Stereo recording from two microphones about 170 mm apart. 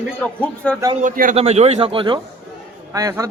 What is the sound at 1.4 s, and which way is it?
A man's voice, 40° right (ahead or behind).